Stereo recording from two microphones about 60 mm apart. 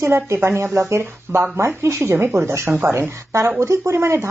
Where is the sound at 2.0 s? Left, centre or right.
Right.